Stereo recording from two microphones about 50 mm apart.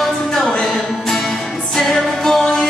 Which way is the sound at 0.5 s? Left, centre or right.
Centre.